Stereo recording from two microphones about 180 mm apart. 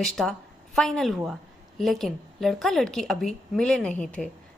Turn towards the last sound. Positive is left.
turn(degrees=5)  # may be behind; listen again after turning